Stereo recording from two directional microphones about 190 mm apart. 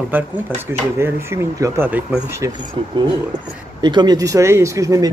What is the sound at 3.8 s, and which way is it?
Speech, 25° right (ahead or behind).